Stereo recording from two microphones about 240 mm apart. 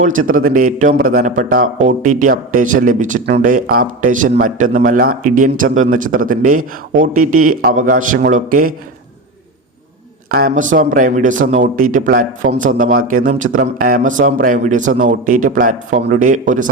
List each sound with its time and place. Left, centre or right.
0.0 s speech: right
10.2 s speech: right